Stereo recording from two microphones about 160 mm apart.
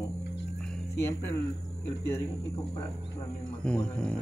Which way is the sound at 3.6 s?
5° left (ahead or behind).